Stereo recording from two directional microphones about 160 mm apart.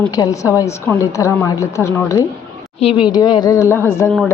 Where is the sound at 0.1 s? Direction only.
20° left (ahead or behind).